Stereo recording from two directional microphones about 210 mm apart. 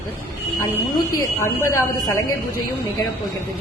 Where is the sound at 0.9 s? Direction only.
15° left (ahead or behind).